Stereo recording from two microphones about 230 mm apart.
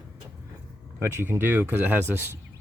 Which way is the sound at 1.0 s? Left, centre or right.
Centre.